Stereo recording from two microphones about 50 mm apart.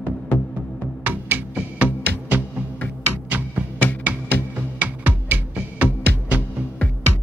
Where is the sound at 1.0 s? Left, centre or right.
Right.